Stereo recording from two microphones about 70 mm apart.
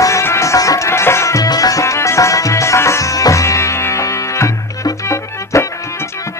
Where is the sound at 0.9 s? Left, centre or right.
Left.